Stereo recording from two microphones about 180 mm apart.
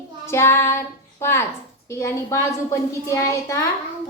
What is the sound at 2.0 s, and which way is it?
A child's voice, 15° left (ahead or behind).